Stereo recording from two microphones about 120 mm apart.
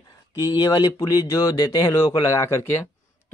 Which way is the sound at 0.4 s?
30° left (ahead or behind).